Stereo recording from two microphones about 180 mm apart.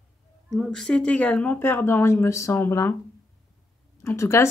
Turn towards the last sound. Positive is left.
turn(degrees=15)  # may be behind; listen again after turning